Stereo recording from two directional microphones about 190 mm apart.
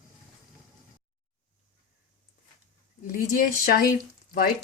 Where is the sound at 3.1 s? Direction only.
50° left (ahead or behind).